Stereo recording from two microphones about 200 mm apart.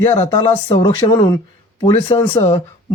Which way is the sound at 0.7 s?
20° left (ahead or behind).